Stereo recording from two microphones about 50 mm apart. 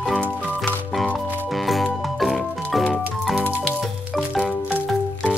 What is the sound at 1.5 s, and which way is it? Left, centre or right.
Music, centre.